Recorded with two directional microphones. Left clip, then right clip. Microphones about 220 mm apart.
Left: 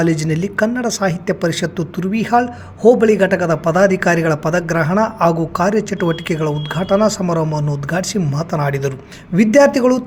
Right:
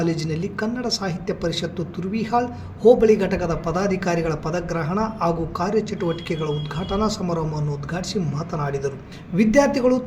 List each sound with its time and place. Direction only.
0.0 s a woman's voice: 45° left (ahead or behind)